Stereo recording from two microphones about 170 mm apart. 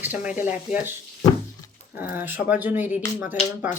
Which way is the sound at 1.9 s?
10° right (ahead or behind).